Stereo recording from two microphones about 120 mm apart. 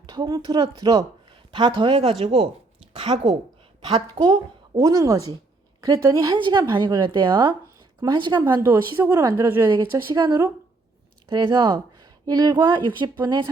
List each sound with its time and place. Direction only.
0.0 s speech: 35° right (ahead or behind)
0.4 s speech: 45° right (ahead or behind)
2.9 s a sound: 45° right (ahead or behind)
4.1 s a woman's voice: 40° right (ahead or behind)
4.8 s speech: 25° right (ahead or behind)
6.3 s speech: 40° right (ahead or behind)
8.6 s speech: 20° right (ahead or behind)
11.3 s speech: 40° right (ahead or behind)